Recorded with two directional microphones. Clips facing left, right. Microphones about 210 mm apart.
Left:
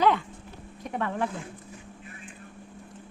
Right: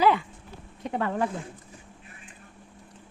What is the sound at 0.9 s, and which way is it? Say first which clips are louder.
Speech: right 2 dB; 35° right (ahead or behind).